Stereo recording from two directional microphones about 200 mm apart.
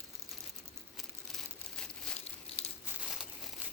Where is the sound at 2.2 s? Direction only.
30° left (ahead or behind).